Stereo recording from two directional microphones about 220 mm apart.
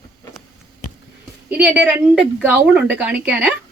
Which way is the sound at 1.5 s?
5° right (ahead or behind).